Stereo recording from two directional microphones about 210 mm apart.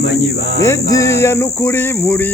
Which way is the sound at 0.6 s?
15° left (ahead or behind).